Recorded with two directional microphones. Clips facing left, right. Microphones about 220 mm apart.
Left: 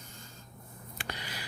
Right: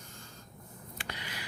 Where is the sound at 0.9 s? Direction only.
40° left (ahead or behind).